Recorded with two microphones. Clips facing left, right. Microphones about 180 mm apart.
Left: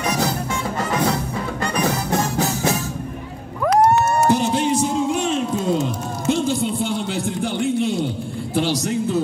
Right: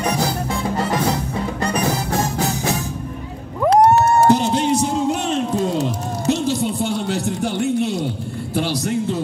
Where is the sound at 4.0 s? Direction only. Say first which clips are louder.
Right 3 dB; 35° right (ahead or behind).